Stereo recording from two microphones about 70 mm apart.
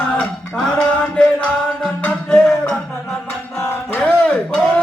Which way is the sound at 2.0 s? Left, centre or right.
Centre.